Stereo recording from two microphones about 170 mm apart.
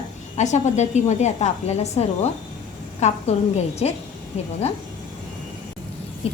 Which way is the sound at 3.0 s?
40° left (ahead or behind).